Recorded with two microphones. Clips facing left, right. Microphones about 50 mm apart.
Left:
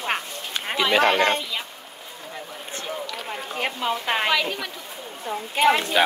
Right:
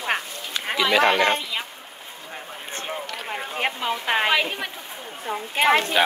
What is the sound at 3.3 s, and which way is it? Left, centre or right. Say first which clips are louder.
A woman's voice: right 3 dB; centre.